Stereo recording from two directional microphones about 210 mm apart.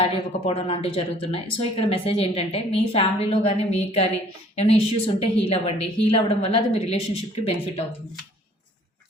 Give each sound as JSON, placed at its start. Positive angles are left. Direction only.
{"t": 0.0, "sound": "speech", "side_deg": 25}